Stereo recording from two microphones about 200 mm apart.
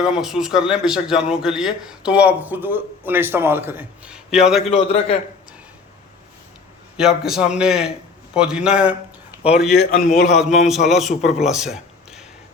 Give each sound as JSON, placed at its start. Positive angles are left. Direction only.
{"t": 0.0, "sound": "a man's voice", "side_deg": 0}
{"t": 4.7, "sound": "a man's voice", "side_deg": 30}
{"t": 6.9, "sound": "a man's voice", "side_deg": 0}